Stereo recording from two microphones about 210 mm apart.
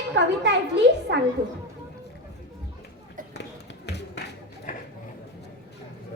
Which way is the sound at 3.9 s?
55° left (ahead or behind).